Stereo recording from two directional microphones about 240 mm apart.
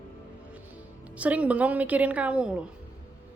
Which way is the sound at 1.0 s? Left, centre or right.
Centre.